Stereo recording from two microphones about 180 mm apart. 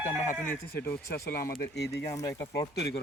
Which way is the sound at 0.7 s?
60° left (ahead or behind).